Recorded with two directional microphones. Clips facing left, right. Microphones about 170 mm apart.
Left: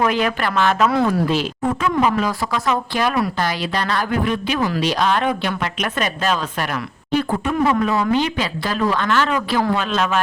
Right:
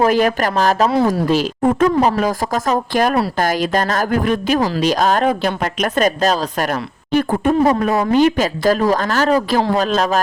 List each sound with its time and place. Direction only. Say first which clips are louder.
0.0 s speech: right 5 dB; 40° right (ahead or behind)